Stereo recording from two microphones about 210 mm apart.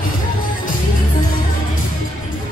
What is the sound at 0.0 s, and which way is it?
Music, 40° left (ahead or behind).